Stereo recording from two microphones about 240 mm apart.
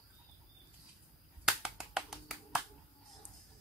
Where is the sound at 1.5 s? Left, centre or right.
Centre.